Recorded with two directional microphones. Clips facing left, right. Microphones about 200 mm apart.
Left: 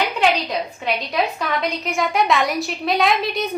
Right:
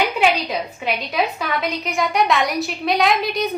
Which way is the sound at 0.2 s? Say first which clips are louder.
Even; 5° right (ahead or behind).